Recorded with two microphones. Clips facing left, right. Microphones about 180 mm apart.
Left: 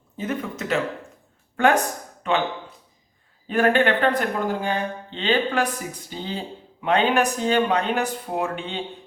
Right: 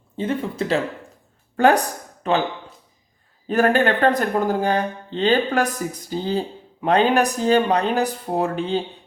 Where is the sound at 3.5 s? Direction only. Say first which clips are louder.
Right 2 dB; 40° right (ahead or behind).